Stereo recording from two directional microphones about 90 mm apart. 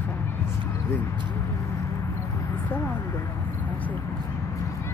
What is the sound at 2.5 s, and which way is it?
Speech, 20° left (ahead or behind).